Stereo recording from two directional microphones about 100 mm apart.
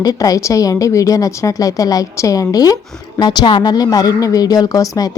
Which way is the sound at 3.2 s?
50° left (ahead or behind).